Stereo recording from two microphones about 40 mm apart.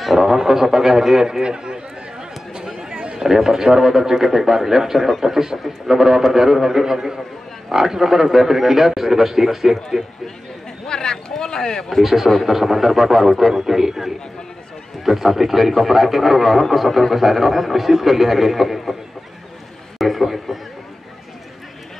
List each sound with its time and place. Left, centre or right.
0.2 s a man's voice: centre
2.5 s chatter: centre
3.1 s a sound: centre
3.3 s a man's voice: centre
10.9 s a sound: centre
11.9 s a man's voice: centre
20.0 s a man's voice: centre